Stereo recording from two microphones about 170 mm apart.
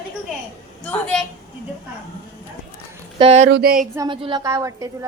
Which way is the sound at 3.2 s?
40° right (ahead or behind).